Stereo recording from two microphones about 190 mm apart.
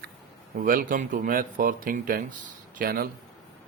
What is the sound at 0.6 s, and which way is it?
Speech, 45° right (ahead or behind).